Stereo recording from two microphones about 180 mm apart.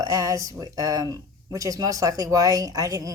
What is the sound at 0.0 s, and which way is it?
Speech, 20° right (ahead or behind).